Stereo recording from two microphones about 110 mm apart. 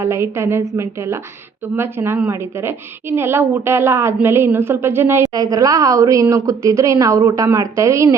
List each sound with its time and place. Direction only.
0.0 s a woman's voice: 25° right (ahead or behind)
5.2 s a woman's voice: 35° right (ahead or behind)